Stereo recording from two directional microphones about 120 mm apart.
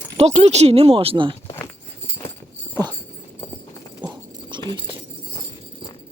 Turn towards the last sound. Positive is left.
turn(degrees=-40)  # may be behind; listen again after turning